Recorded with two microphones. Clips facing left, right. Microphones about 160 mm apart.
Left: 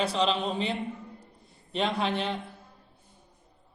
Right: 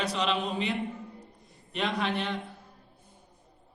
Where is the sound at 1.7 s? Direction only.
30° left (ahead or behind).